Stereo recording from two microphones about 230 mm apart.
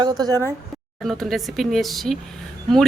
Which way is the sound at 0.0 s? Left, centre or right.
Centre.